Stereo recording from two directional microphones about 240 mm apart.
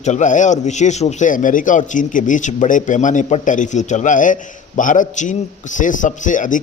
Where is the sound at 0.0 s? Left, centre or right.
Left.